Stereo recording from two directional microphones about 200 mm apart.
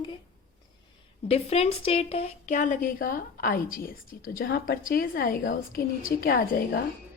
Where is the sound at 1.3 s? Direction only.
30° left (ahead or behind).